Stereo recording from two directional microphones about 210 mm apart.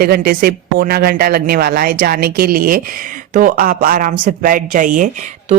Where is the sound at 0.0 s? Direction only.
45° right (ahead or behind).